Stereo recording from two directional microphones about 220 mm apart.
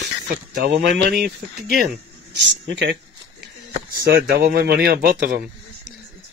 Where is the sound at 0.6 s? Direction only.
50° right (ahead or behind).